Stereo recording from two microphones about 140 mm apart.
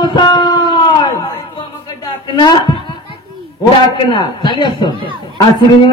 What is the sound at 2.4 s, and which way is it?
Speech, 35° left (ahead or behind).